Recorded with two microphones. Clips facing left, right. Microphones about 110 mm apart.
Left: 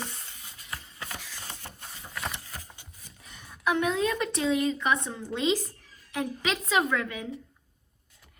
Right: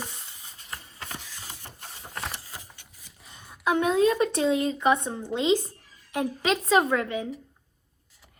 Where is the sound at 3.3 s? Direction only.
25° right (ahead or behind).